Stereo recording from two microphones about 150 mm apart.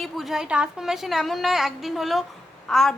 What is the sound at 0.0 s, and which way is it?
A woman's voice, centre (ahead or behind).